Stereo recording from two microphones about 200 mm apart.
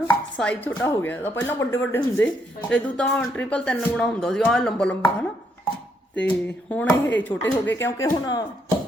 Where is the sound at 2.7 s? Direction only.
5° left (ahead or behind).